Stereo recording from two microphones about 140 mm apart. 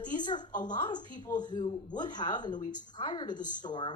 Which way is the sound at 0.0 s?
30° left (ahead or behind).